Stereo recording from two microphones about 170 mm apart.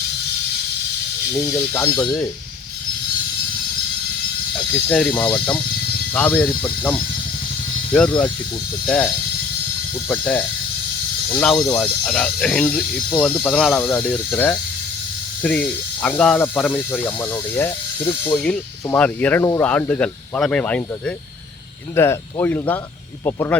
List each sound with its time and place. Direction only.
1.3 s speech: 15° left (ahead or behind)
4.5 s speech: 10° left (ahead or behind)
8.9 s speech: 5° left (ahead or behind)